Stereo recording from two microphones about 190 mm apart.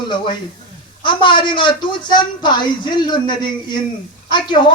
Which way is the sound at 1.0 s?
25° left (ahead or behind).